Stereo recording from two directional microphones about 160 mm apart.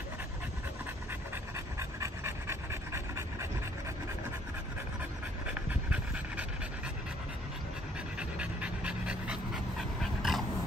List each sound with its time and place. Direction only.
1.8 s pant: 15° right (ahead or behind)
5.5 s pant: 10° right (ahead or behind)
8.2 s dog: 5° right (ahead or behind)